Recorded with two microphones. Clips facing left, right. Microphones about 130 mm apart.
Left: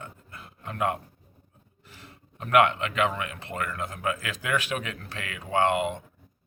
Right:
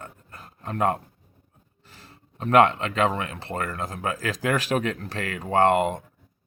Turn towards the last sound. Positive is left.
turn(degrees=-40)  # may be behind; listen again after turning